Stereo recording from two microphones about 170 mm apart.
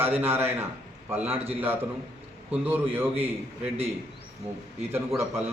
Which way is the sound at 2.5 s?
10° right (ahead or behind).